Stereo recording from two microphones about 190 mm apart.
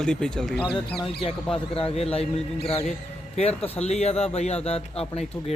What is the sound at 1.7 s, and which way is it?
Speech, 30° left (ahead or behind).